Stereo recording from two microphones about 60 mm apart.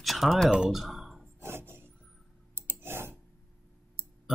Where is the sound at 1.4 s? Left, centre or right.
Right.